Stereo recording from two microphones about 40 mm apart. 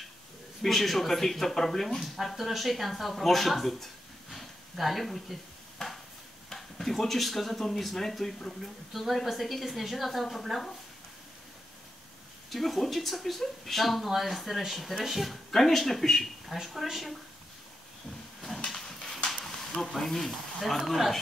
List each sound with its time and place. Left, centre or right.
0.6 s speech: centre
2.1 s speech: centre
12.4 s speech: centre
18.8 s a sound: centre
19.4 s speech: centre